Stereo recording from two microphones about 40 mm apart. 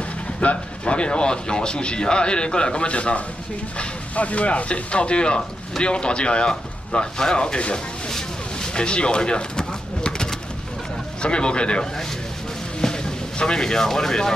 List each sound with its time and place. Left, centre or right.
0.4 s speech: left
8.7 s pigeon: left
11.2 s speech: left
12.8 s vehicle: centre
13.4 s speech: centre